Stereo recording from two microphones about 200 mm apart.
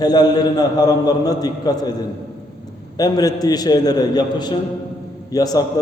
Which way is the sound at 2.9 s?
20° left (ahead or behind).